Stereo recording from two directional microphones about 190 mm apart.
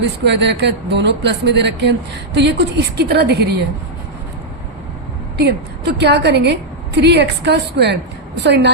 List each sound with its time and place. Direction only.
0.3 s speech: 65° right (ahead or behind)
5.4 s speech: 60° right (ahead or behind)